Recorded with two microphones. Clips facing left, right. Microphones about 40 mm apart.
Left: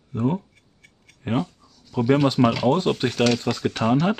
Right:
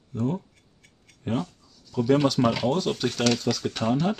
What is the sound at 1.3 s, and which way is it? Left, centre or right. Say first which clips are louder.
Speech: left 4 dB; left.